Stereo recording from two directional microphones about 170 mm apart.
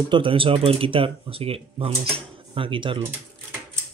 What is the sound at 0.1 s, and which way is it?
Speech, 30° right (ahead or behind).